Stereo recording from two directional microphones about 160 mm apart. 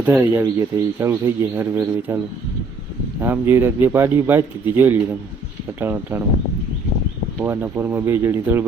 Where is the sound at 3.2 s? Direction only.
15° right (ahead or behind).